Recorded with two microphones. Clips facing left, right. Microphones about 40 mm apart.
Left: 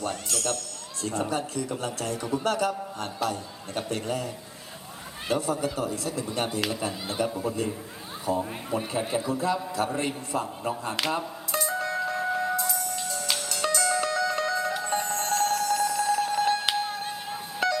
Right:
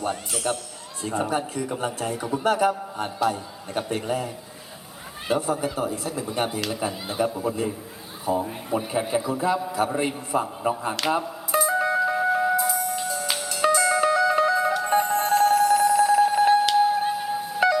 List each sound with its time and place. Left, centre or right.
0.0 s a man's voice: centre
5.3 s a man's voice: centre
11.0 s music: centre